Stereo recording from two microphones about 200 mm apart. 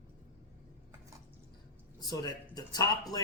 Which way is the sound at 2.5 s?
20° left (ahead or behind).